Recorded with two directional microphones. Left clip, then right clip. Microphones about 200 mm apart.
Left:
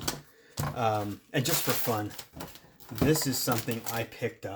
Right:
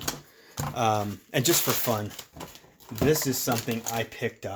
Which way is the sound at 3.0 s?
35° right (ahead or behind).